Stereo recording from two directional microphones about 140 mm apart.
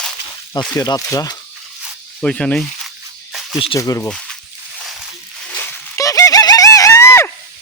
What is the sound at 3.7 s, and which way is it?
Speech, 25° left (ahead or behind).